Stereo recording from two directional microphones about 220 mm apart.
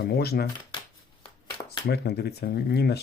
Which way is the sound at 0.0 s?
45° left (ahead or behind).